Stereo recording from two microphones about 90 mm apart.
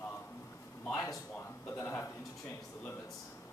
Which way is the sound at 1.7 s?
30° left (ahead or behind).